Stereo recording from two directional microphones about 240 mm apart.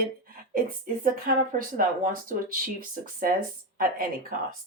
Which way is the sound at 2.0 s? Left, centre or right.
Right.